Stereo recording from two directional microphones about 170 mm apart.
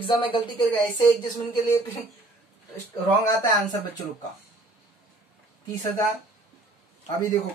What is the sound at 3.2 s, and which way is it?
Speech, 20° left (ahead or behind).